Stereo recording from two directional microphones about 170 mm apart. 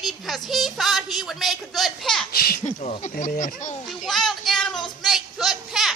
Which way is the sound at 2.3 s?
60° left (ahead or behind).